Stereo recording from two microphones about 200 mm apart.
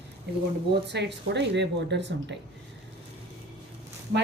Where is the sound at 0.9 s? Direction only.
60° right (ahead or behind).